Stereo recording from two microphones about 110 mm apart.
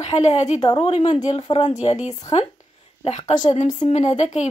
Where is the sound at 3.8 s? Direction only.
85° left.